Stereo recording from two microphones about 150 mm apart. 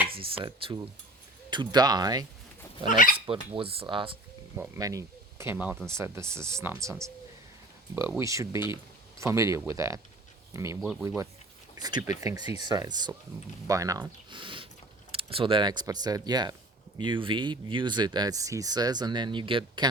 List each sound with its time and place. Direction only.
0.2 s speech: 35° right (ahead or behind)
2.9 s speech: 60° left (ahead or behind)
3.2 s speech: 40° right (ahead or behind)
4.5 s speech: 15° right (ahead or behind)
8.2 s speech: 20° right (ahead or behind)